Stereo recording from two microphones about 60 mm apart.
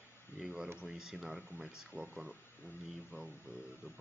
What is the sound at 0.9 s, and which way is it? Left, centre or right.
Speech, centre.